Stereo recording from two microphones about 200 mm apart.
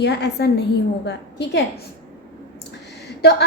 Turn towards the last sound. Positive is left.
turn(degrees=55)  # may be behind; listen again after turning